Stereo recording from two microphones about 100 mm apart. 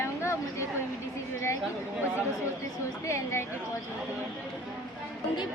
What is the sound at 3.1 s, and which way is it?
Speech, 30° left (ahead or behind).